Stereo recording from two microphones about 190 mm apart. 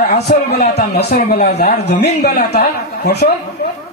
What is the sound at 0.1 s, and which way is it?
Speech, 60° left (ahead or behind).